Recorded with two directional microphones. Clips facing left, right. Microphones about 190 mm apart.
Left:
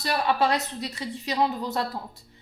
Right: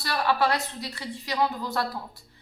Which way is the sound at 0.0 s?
20° left (ahead or behind).